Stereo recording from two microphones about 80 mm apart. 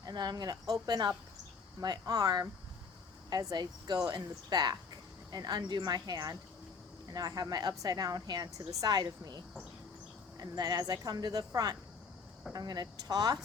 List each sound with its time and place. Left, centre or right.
0.0 s a woman's voice: right